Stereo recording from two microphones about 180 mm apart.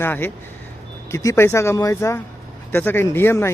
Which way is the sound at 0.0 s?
10° left (ahead or behind).